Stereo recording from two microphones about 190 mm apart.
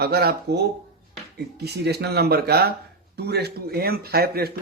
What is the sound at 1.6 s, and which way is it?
A man's voice, 60° right (ahead or behind).